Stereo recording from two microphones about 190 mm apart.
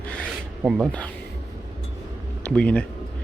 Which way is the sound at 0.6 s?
Centre (ahead or behind).